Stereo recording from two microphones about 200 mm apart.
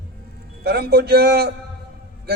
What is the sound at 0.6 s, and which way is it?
Speech, 50° right (ahead or behind).